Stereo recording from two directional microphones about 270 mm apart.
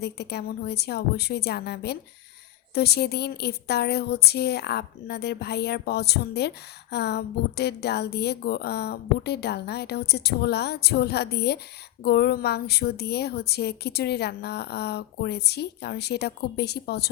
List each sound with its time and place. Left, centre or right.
0.0 s a woman's voice: left